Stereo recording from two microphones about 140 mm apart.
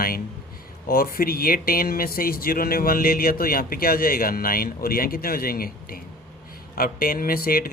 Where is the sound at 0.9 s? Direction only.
90° left.